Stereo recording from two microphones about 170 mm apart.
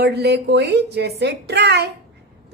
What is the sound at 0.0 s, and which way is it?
A woman's voice, 75° right (ahead or behind).